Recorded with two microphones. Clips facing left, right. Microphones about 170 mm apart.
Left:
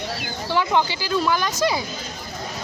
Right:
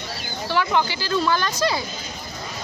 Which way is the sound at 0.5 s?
20° left (ahead or behind).